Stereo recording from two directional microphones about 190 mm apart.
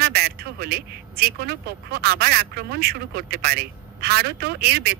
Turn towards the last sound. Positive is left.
turn(degrees=-55)  # may be behind; listen again after turning